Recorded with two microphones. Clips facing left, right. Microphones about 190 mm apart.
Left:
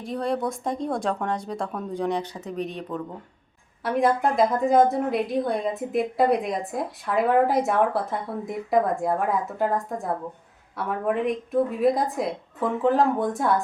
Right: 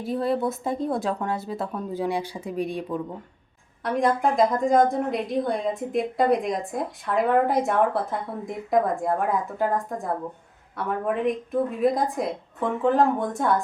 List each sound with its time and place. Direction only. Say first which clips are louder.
0.0 s a woman's voice: right 2 dB; 5° right (ahead or behind)
3.8 s a woman's voice: even; 5° left (ahead or behind)